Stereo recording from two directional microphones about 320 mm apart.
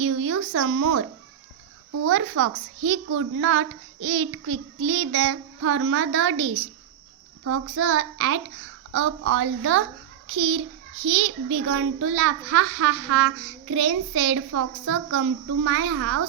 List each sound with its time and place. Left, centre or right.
0.0 s speech: right
2.0 s a child's voice: right